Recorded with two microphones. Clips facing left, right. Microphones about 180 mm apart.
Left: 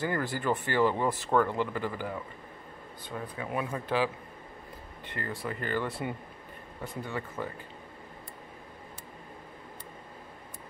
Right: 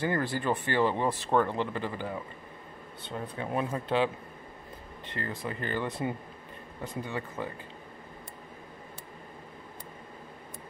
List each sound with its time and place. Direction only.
0.0 s speech: 20° right (ahead or behind)